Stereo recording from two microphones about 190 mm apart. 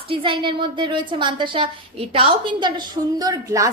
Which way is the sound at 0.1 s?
25° right (ahead or behind).